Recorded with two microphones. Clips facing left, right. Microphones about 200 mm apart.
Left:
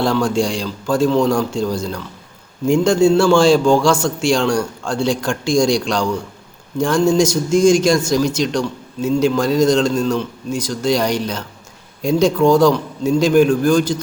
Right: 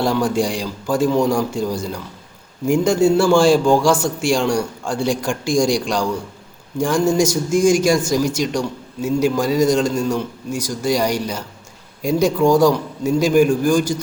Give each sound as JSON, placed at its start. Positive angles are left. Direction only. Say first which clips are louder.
{"t": 0.0, "sound": "a man's voice", "louder": "left 1 dB", "side_deg": -15}
{"t": 3.1, "sound": "a man's voice", "louder": "even", "side_deg": -15}
{"t": 12.5, "sound": "a man's voice", "louder": "left 1 dB", "side_deg": -15}